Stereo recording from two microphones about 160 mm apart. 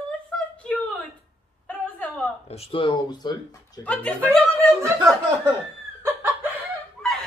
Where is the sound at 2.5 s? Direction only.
35° left (ahead or behind).